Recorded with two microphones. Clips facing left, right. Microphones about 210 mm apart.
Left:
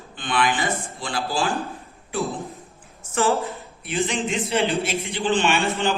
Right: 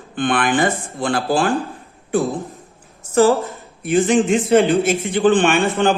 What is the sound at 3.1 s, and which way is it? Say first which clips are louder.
Speech: right 8 dB; 40° right (ahead or behind).